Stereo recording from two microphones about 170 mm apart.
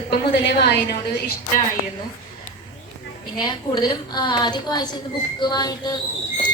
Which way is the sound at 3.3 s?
25° left (ahead or behind).